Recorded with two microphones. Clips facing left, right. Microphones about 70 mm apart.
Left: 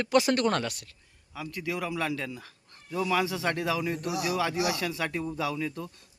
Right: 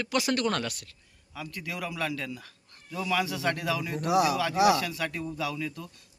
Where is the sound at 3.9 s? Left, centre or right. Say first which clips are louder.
Right 4 dB; right.